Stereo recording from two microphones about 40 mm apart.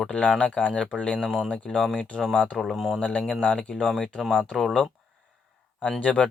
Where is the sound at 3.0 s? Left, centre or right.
Left.